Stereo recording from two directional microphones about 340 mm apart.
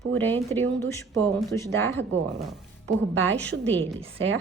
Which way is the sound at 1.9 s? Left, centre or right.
Right.